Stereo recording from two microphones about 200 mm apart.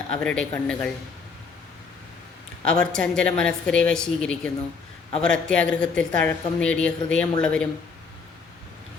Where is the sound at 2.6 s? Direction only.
5° left (ahead or behind).